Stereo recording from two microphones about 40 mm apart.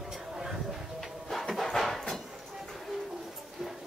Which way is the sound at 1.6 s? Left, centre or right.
Centre.